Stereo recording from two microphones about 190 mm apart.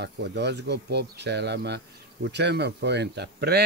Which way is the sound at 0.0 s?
60° right (ahead or behind).